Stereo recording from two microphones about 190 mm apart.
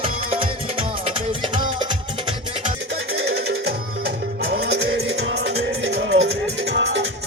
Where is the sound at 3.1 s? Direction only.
65° right (ahead or behind).